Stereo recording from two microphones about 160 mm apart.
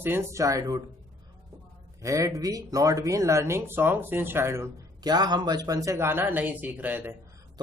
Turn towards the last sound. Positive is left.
turn(degrees=-10)  # may be behind; listen again after turning